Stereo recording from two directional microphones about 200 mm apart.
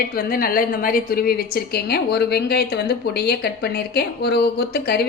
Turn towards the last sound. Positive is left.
turn(degrees=50)  # may be behind; listen again after turning